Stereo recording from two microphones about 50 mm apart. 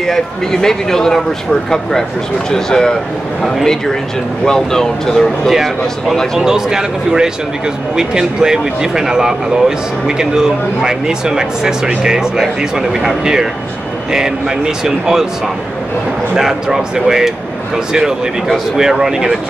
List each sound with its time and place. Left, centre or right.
0.0 s speech: centre
4.5 s speech: centre
5.5 s speech: centre
16.3 s speech: centre
18.8 s speech: centre